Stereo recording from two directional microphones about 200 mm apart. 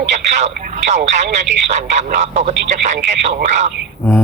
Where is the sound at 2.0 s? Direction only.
35° right (ahead or behind).